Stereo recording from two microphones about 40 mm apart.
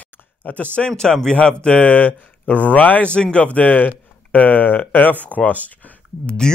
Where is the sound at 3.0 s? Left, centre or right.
Left.